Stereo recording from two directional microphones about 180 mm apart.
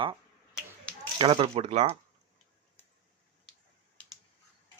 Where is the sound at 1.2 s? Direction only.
30° right (ahead or behind).